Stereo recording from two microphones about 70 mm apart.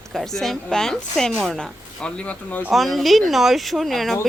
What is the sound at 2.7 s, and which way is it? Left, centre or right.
Speech, centre.